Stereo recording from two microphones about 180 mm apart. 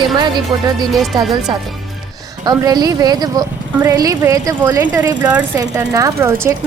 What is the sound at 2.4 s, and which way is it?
A woman's voice, 20° right (ahead or behind).